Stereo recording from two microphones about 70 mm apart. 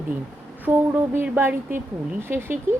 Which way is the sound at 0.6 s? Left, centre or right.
Right.